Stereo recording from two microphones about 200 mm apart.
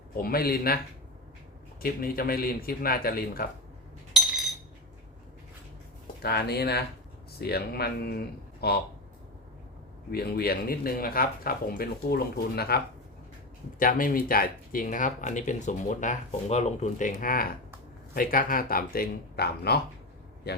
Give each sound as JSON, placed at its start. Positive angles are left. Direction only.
{"t": 0.2, "sound": "speech", "side_deg": 50}
{"t": 1.8, "sound": "speech", "side_deg": 45}
{"t": 4.1, "sound": "a sound", "side_deg": 0}
{"t": 6.2, "sound": "speech", "side_deg": 55}
{"t": 10.1, "sound": "speech", "side_deg": 50}